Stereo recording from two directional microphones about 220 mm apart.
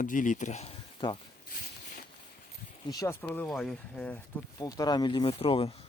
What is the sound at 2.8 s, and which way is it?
Speech, 15° left (ahead or behind).